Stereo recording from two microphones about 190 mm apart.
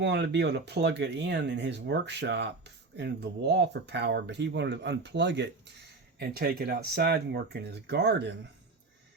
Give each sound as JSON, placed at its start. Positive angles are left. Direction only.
{"t": 0.0, "sound": "speech", "side_deg": -65}
{"t": 6.1, "sound": "speech", "side_deg": -55}